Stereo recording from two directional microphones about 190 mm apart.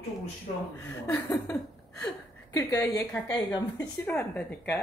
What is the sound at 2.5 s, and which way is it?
Speech, 15° left (ahead or behind).